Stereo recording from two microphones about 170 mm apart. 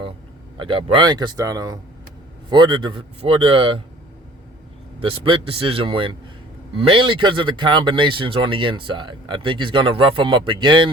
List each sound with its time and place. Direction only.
0.5 s speech: 30° right (ahead or behind)
4.9 s speech: 30° right (ahead or behind)